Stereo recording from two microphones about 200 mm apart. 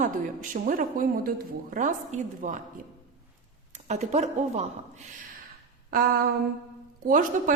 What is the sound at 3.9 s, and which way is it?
Speech, 35° right (ahead or behind).